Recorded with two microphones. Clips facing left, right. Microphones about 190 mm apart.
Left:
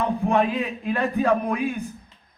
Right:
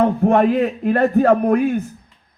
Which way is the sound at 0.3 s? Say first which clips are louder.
Right 7 dB; 55° right (ahead or behind).